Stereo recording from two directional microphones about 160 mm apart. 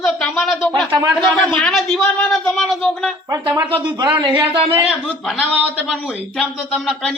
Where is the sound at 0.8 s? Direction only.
25° right (ahead or behind).